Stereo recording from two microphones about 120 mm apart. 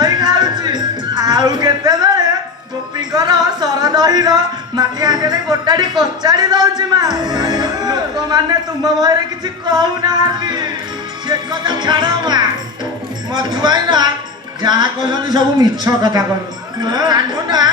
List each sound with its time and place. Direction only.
0.0 s music: 35° right (ahead or behind)
6.0 s speech: 35° right (ahead or behind)